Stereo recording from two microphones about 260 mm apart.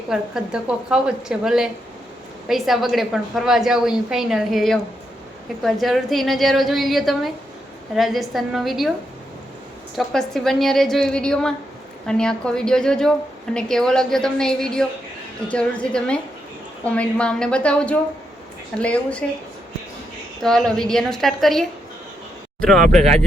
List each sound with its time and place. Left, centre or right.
0.1 s a woman's voice: centre
9.9 s a woman's voice: centre
20.4 s a woman's voice: centre
23.0 s speech: right